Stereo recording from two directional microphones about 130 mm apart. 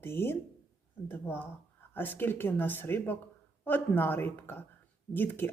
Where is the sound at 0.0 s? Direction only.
20° left (ahead or behind).